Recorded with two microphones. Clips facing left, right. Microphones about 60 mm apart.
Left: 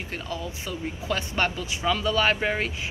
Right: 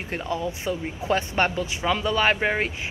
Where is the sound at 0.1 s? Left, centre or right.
Right.